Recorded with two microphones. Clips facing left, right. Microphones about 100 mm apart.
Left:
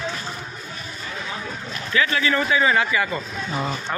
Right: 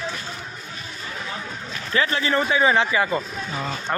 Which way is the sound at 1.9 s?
35° right (ahead or behind).